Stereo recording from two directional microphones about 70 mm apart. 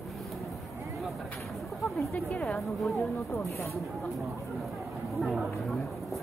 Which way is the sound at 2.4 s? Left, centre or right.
Centre.